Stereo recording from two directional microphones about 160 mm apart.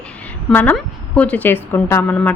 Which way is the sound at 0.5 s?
10° left (ahead or behind).